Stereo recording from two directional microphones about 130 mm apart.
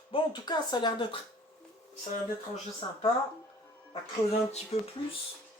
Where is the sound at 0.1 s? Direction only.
35° left (ahead or behind).